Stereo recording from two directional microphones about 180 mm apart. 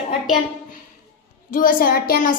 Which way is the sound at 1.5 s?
50° left (ahead or behind).